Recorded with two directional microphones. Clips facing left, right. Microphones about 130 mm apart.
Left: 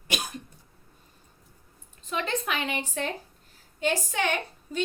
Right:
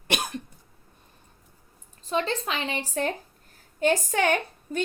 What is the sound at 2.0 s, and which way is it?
A woman's voice, 30° right (ahead or behind).